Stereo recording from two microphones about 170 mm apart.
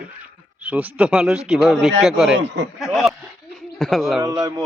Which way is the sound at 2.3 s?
90° right.